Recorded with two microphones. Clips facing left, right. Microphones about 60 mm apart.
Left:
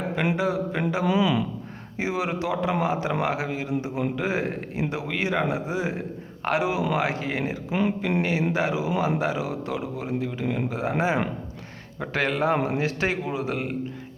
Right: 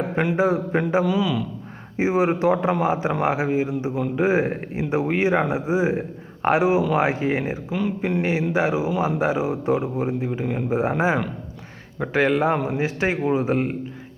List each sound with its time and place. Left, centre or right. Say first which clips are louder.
0.3 s speech: right 5 dB; right
1.0 s speech: even; centre
2.0 s a man's voice: right 7 dB; right
7.7 s speech: left 2 dB; left
8.2 s speech: right 4 dB; centre
11.9 s speech: right 5 dB; centre
12.5 s speech: even; centre
12.8 s speech: right 3 dB; centre
13.2 s speech: right 7 dB; right